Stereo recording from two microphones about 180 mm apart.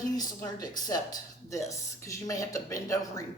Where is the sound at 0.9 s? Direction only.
20° left (ahead or behind).